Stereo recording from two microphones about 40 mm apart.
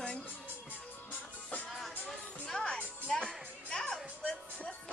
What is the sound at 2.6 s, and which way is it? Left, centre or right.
Music, left.